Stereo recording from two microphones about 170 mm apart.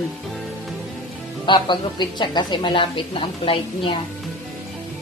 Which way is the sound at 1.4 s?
25° left (ahead or behind).